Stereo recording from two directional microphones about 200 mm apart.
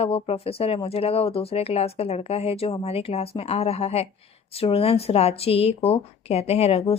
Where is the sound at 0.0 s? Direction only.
30° left (ahead or behind).